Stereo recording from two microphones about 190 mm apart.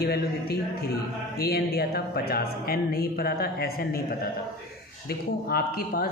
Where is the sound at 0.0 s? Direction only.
55° left (ahead or behind).